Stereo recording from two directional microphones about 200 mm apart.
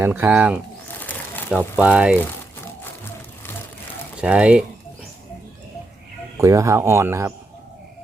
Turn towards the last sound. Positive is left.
turn(degrees=-15)  # may be behind; listen again after turning